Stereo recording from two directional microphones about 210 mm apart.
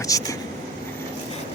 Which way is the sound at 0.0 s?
15° left (ahead or behind).